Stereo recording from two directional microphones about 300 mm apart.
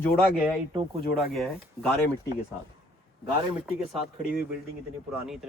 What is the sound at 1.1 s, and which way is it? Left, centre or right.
Speech, centre.